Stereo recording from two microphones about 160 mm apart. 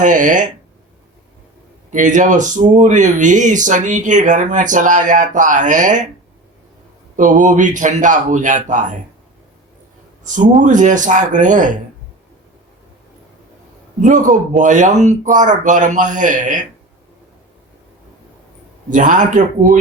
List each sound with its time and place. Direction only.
0.0 s speech: 55° right (ahead or behind)
1.9 s speech: 50° right (ahead or behind)
7.2 s speech: 55° right (ahead or behind)
10.2 s speech: 50° right (ahead or behind)
14.0 s speech: 55° right (ahead or behind)
18.9 s speech: 55° right (ahead or behind)